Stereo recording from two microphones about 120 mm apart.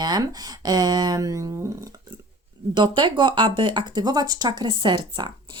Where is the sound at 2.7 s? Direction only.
40° right (ahead or behind).